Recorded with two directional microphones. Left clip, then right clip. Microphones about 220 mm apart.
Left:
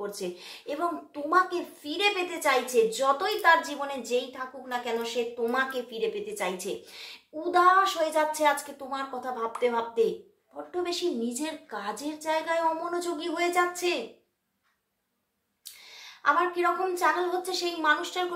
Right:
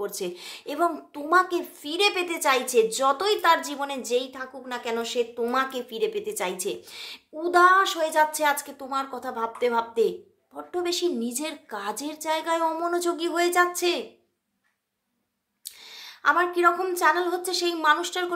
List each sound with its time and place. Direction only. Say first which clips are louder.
0.0 s a woman's voice: right 3 dB; 40° right (ahead or behind)
15.6 s a woman's voice: right 4 dB; 45° right (ahead or behind)